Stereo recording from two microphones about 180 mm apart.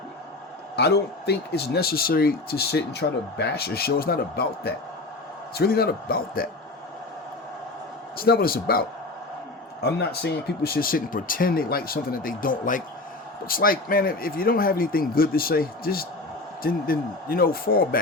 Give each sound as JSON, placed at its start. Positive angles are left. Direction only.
{"t": 0.8, "sound": "speech", "side_deg": 65}
{"t": 8.2, "sound": "speech", "side_deg": 55}
{"t": 9.8, "sound": "speech", "side_deg": 65}